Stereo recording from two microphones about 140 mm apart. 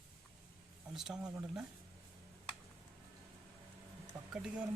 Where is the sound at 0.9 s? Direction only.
5° right (ahead or behind).